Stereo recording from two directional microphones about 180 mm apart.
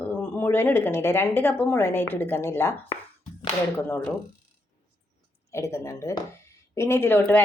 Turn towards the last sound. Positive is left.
turn(degrees=10)  # may be behind; listen again after turning